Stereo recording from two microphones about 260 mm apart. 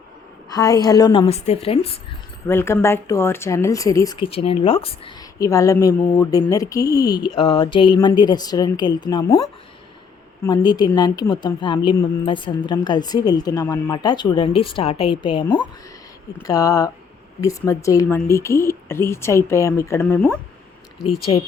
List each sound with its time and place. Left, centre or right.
0.5 s a woman's voice: centre
2.5 s a woman's voice: centre
10.4 s a woman's voice: centre